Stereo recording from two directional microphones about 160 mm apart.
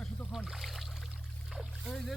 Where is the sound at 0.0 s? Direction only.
Centre (ahead or behind).